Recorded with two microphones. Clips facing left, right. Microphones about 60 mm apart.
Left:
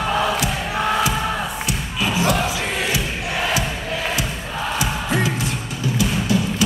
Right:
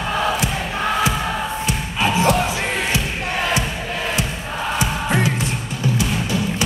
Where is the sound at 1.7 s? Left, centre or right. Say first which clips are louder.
Right 3 dB; right.